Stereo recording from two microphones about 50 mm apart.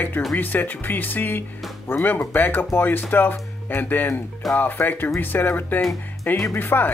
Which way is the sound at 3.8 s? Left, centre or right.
Left.